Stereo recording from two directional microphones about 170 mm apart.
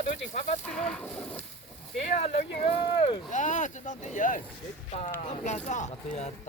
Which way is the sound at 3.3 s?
45° left (ahead or behind).